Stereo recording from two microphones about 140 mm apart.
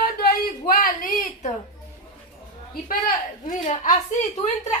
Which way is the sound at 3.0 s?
70° left (ahead or behind).